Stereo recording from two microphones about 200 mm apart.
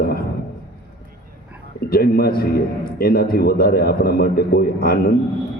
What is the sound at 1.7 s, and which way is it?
A man's voice, 50° left (ahead or behind).